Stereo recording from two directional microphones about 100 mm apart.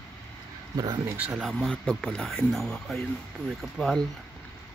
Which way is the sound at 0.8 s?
30° right (ahead or behind).